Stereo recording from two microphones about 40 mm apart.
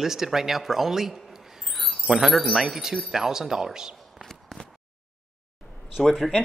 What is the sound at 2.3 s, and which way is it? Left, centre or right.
Speech, centre.